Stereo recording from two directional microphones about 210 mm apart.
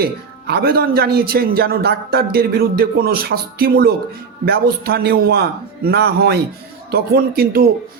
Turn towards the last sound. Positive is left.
turn(degrees=-45)  # may be behind; listen again after turning